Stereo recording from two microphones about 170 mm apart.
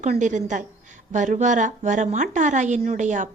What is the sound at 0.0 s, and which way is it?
A woman's voice, 45° right (ahead or behind).